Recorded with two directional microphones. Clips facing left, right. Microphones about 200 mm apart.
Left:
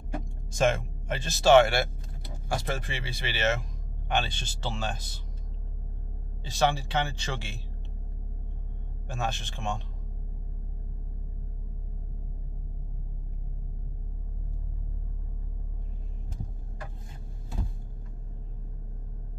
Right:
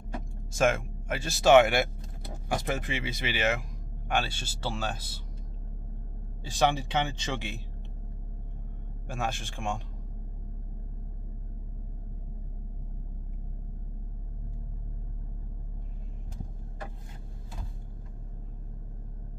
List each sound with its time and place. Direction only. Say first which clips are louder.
0.6 s speech: even; 5° right (ahead or behind)
6.4 s speech: even; 15° right (ahead or behind)
9.0 s speech: even; 10° right (ahead or behind)